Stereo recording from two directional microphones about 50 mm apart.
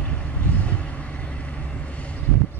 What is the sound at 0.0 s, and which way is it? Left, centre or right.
Vehicle, left.